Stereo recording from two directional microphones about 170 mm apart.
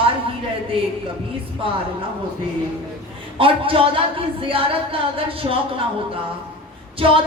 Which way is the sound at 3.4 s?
30° right (ahead or behind).